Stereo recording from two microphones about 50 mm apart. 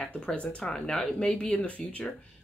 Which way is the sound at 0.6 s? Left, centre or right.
Centre.